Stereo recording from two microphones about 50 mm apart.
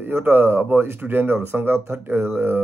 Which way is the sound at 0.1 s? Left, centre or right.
Right.